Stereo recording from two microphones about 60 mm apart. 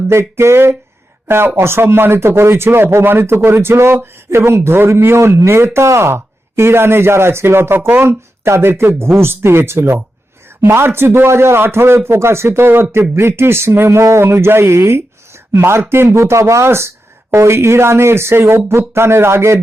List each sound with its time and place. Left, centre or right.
0.1 s speech: right
8.0 s speech: right
14.3 s speech: right